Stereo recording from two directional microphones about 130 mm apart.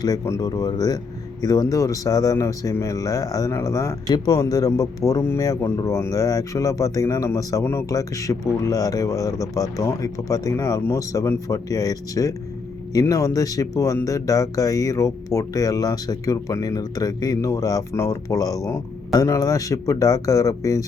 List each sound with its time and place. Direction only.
0.0 s speech: 25° left (ahead or behind)